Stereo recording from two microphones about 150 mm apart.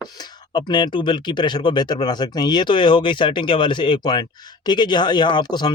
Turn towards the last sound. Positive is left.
turn(degrees=30)  # may be behind; listen again after turning